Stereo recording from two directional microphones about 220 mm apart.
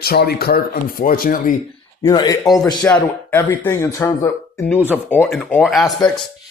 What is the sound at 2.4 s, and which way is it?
Speech, centre (ahead or behind).